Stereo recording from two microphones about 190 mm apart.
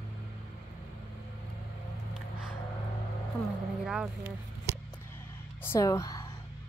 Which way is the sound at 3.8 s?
5° right (ahead or behind).